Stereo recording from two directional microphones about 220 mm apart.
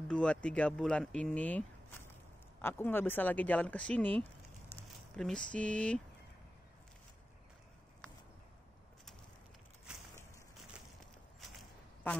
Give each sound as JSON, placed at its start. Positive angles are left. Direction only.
{"t": 0.1, "sound": "speech", "side_deg": 5}